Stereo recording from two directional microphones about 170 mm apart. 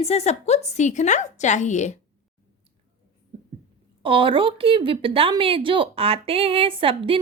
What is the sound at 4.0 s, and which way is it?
A woman's voice, 30° right (ahead or behind).